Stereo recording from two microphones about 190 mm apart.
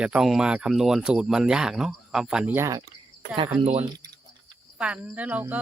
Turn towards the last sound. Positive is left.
turn(degrees=-10)  # may be behind; listen again after turning